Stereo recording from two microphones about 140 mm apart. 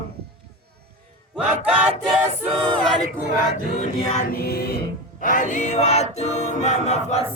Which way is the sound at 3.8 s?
70° left (ahead or behind).